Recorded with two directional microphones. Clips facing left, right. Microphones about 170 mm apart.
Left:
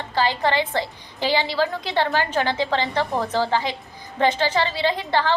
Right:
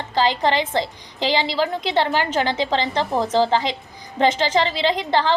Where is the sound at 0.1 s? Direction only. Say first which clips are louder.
Right 2 dB; 20° right (ahead or behind).